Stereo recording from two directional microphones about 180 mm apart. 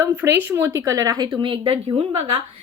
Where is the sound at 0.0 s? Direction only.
15° right (ahead or behind).